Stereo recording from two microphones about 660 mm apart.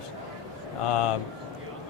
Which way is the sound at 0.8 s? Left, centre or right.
Left.